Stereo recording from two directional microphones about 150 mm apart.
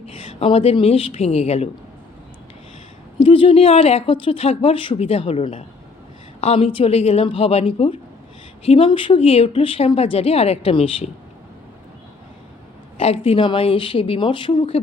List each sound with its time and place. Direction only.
0.3 s speech: 40° left (ahead or behind)
3.2 s speech: 35° left (ahead or behind)
13.0 s speech: 40° left (ahead or behind)